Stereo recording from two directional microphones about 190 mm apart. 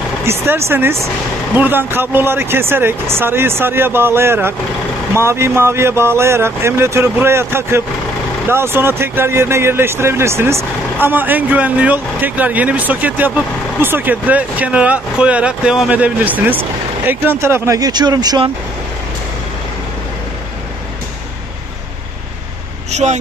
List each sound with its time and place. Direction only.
0.2 s speech: 15° right (ahead or behind)
22.8 s vehicle: 35° right (ahead or behind)